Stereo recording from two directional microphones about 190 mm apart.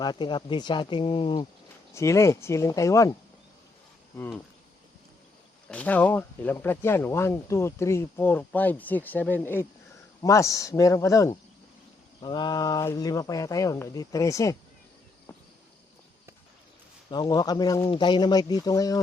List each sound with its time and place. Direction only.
0.0 s speech: 25° left (ahead or behind)
1.9 s speech: 15° left (ahead or behind)
5.6 s speech: 5° left (ahead or behind)
17.1 s speech: 20° left (ahead or behind)